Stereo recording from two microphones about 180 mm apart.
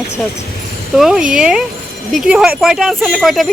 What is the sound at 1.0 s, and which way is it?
Speech, 5° right (ahead or behind).